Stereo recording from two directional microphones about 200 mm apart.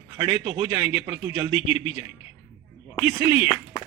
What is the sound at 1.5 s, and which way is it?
Speech, 30° left (ahead or behind).